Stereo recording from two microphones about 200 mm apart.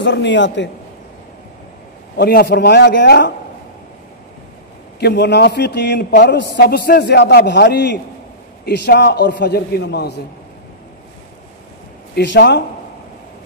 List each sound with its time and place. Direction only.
0.0 s a man's voice: 60° left (ahead or behind)
2.1 s a man's voice: 55° left (ahead or behind)
5.0 s a man's voice: 55° left (ahead or behind)
12.2 s a man's voice: 60° left (ahead or behind)